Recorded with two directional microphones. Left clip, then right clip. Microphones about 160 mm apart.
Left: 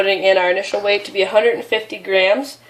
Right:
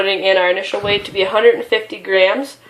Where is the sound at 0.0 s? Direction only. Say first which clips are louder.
Even; 25° left (ahead or behind).